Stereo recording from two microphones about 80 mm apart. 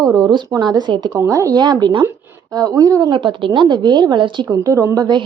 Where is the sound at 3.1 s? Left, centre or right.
Right.